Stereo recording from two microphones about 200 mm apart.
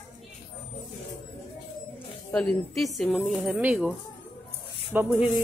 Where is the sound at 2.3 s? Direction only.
5° left (ahead or behind).